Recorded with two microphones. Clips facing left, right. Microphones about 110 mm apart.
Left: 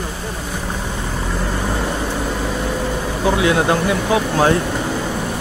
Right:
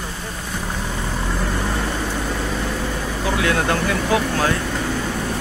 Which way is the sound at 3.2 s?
20° left (ahead or behind).